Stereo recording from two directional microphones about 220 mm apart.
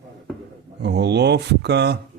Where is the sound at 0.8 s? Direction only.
50° right (ahead or behind).